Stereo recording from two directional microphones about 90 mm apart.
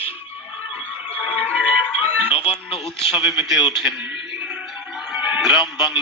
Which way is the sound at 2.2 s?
90° left.